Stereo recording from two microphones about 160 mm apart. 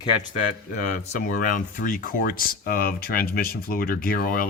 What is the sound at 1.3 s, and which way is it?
Speech, 60° left (ahead or behind).